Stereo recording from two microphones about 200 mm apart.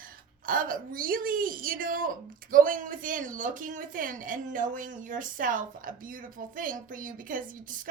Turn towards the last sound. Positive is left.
turn(degrees=-40)  # may be behind; listen again after turning